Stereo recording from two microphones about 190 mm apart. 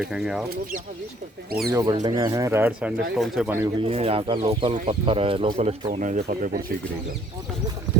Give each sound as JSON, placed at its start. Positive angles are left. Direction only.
{"t": 0.0, "sound": "speech", "side_deg": 0}
{"t": 1.7, "sound": "speech", "side_deg": -20}
{"t": 3.8, "sound": "speech", "side_deg": -30}